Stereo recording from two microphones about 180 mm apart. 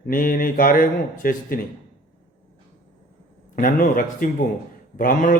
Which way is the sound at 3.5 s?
45° left (ahead or behind).